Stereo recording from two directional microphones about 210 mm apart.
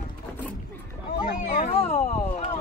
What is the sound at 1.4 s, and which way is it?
Speech, 35° left (ahead or behind).